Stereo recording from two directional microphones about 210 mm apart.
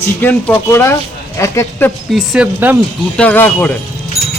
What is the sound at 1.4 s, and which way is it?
Speech, 15° left (ahead or behind).